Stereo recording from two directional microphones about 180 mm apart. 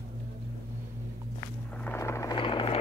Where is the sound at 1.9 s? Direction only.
15° left (ahead or behind).